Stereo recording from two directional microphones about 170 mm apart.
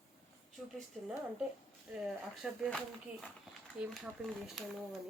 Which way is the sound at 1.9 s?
Centre (ahead or behind).